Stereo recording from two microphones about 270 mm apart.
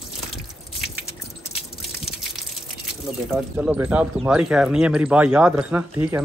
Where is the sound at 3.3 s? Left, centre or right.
Centre.